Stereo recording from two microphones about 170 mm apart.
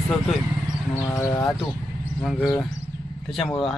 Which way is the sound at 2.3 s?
Centre (ahead or behind).